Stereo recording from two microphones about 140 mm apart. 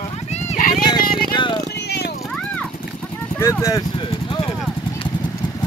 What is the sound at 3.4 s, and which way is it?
Speech, 20° left (ahead or behind).